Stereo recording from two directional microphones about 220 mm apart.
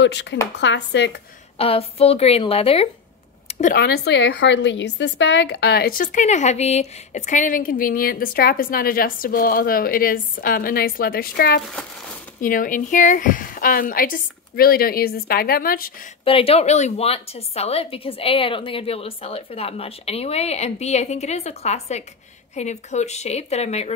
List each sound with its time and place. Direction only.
0.0 s speech: 55° left (ahead or behind)
1.6 s a woman's voice: 25° left (ahead or behind)
3.7 s a woman's voice: 45° left (ahead or behind)
16.3 s a woman's voice: 25° left (ahead or behind)